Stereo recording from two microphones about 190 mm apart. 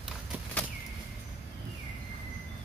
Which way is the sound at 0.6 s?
5° left (ahead or behind).